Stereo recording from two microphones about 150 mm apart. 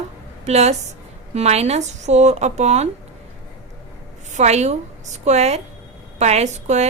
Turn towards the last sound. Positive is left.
turn(degrees=-50)  # may be behind; listen again after turning